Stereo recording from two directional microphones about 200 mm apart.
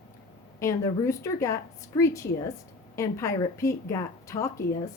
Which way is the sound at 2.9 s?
15° left (ahead or behind).